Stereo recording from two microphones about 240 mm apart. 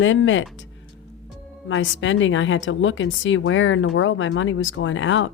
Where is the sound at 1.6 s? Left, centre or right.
Left.